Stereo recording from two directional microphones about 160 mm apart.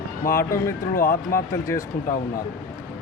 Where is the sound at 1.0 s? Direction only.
60° left (ahead or behind).